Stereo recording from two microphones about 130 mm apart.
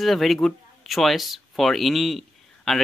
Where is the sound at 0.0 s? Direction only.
Centre (ahead or behind).